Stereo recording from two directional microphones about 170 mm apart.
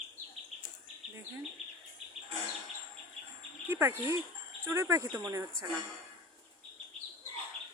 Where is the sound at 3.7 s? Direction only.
15° right (ahead or behind).